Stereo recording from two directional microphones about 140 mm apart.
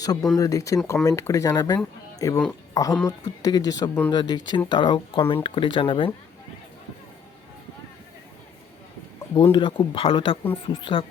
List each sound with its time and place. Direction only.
0.0 s speech: 25° left (ahead or behind)
9.3 s speech: 30° left (ahead or behind)